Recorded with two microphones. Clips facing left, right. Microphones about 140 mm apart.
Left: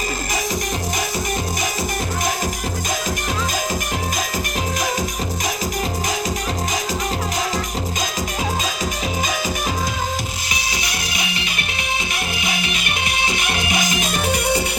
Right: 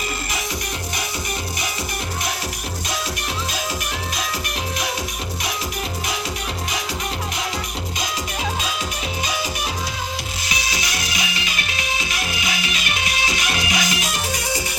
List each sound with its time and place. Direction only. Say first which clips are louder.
10.5 s music: right 2 dB; 50° left (ahead or behind)